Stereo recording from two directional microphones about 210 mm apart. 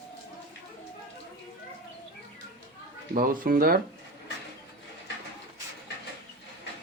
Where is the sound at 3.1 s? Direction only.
40° right (ahead or behind).